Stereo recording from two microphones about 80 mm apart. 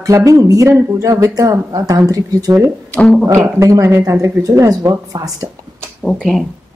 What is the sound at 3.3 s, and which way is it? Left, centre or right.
Speech, right.